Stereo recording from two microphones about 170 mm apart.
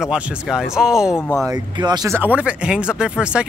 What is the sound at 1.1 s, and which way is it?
Speech, 15° left (ahead or behind).